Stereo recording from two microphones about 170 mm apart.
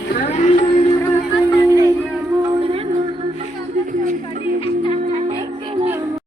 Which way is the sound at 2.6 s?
35° right (ahead or behind).